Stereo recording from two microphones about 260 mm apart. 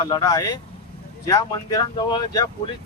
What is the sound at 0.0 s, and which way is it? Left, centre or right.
Speech, centre.